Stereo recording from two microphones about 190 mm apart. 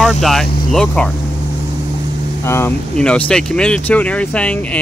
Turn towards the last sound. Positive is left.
turn(degrees=5)  # may be behind; listen again after turning